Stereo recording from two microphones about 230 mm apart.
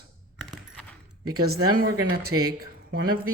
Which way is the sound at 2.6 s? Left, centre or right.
Right.